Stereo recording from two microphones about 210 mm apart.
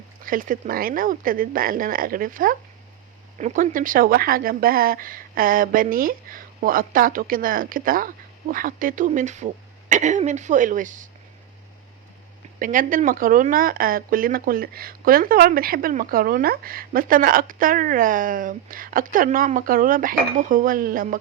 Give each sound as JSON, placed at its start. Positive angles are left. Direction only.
{"t": 0.3, "sound": "speech", "side_deg": -40}
{"t": 12.5, "sound": "speech", "side_deg": -40}